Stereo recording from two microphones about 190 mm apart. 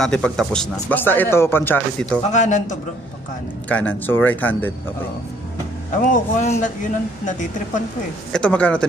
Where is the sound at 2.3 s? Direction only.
40° left (ahead or behind).